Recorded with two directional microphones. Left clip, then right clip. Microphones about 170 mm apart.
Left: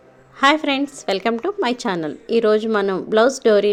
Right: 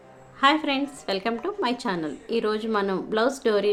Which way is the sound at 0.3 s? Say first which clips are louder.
Left 5 dB; 45° left (ahead or behind).